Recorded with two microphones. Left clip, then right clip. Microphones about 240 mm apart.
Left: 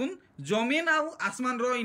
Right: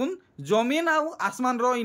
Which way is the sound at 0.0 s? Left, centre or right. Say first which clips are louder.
Right 4 dB; centre.